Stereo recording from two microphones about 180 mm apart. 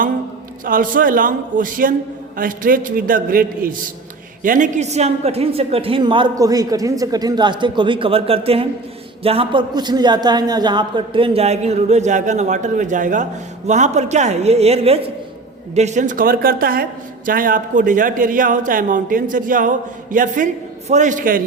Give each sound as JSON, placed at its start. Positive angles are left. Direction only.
{"t": 0.6, "sound": "a man's voice", "side_deg": -50}